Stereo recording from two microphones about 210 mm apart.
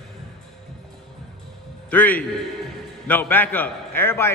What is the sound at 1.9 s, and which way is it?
A man's voice, 10° left (ahead or behind).